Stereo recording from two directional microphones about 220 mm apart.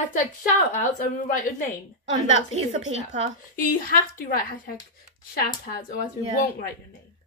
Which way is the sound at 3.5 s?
40° left (ahead or behind).